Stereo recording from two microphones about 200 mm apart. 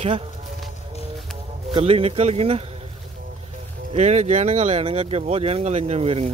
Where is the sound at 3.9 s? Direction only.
35° right (ahead or behind).